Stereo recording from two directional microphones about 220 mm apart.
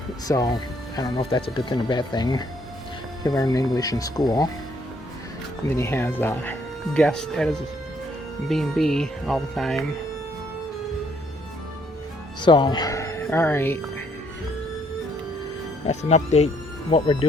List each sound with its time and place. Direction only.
0.3 s speech: 20° left (ahead or behind)
5.6 s speech: 10° left (ahead or behind)
12.4 s speech: 20° left (ahead or behind)
15.9 s speech: 30° left (ahead or behind)